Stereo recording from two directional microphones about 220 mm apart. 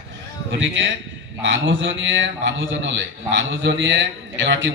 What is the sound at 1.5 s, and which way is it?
A man's voice, 60° right (ahead or behind).